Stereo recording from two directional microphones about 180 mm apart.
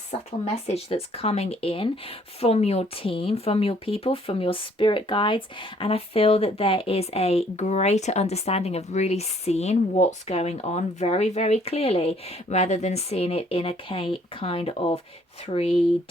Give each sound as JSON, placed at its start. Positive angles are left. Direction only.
{"t": 0.4, "sound": "speech", "side_deg": 35}